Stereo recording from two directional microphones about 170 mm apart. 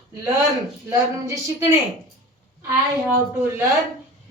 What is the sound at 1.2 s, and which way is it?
Speech, 20° right (ahead or behind).